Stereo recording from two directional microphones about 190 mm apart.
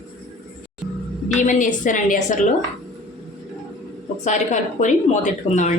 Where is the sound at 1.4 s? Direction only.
40° left (ahead or behind).